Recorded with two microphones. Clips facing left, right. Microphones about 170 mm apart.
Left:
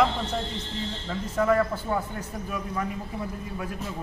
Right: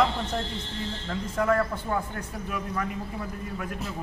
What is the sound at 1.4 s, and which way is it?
A man's voice, 5° left (ahead or behind).